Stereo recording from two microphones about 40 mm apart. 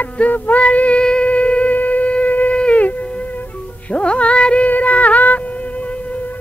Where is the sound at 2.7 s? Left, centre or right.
Left.